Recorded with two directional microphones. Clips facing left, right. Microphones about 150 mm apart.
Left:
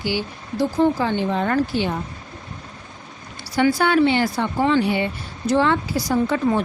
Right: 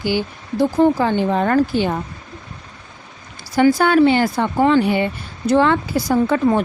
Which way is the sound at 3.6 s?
45° right (ahead or behind).